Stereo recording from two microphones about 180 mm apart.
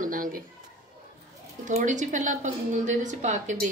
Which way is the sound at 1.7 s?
45° right (ahead or behind).